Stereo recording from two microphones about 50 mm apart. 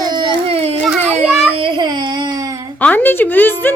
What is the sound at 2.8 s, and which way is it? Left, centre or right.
Speech, left.